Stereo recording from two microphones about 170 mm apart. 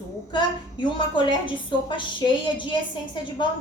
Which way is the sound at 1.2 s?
30° left (ahead or behind).